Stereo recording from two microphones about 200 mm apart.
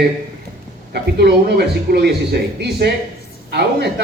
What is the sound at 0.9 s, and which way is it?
Speech, 55° right (ahead or behind).